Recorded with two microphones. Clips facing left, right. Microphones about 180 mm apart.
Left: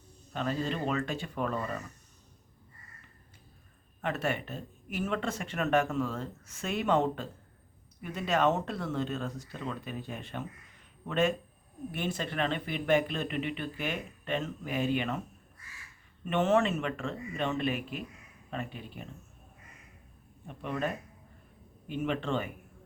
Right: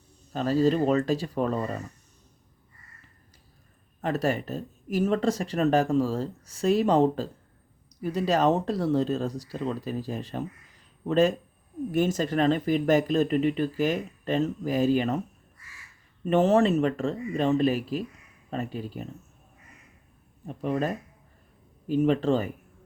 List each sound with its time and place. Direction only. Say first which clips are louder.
0.3 s speech: right 10 dB; 35° right (ahead or behind)
4.0 s speech: right 6 dB; 35° right (ahead or behind)
16.2 s speech: right 6 dB; 35° right (ahead or behind)
20.5 s speech: right 6 dB; 35° right (ahead or behind)